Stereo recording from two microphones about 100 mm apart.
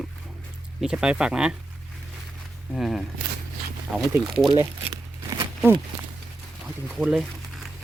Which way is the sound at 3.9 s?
15° right (ahead or behind).